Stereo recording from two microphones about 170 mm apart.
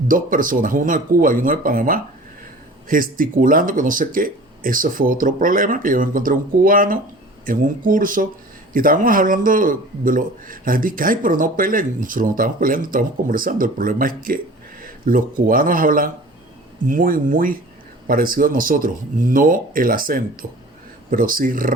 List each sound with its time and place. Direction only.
0.1 s speech: 55° right (ahead or behind)